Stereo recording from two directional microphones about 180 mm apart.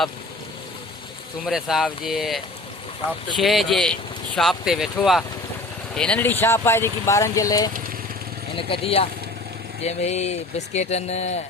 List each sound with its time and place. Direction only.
1.5 s speech: centre (ahead or behind); by 7.7 s 20° left (ahead or behind)
8.5 s speech: 30° left (ahead or behind)